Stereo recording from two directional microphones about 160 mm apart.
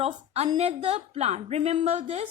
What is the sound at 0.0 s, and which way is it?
A woman's voice, 40° right (ahead or behind).